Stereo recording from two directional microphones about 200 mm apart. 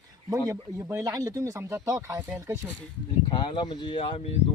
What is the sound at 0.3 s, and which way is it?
Speech, 15° right (ahead or behind).